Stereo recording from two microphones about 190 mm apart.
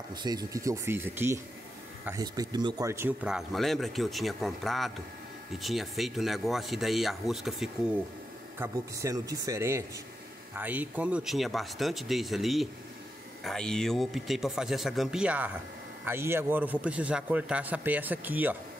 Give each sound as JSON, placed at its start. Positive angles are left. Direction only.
{"t": 0.1, "sound": "speech", "side_deg": -20}
{"t": 8.5, "sound": "speech", "side_deg": -15}